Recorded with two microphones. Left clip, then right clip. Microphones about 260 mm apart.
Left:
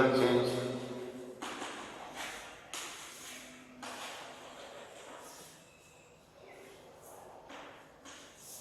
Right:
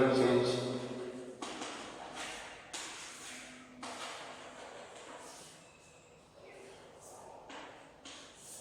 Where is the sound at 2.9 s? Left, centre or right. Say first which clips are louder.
Even; centre.